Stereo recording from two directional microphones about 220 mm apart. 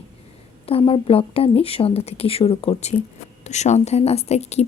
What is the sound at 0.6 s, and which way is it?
A woman's voice, 25° left (ahead or behind).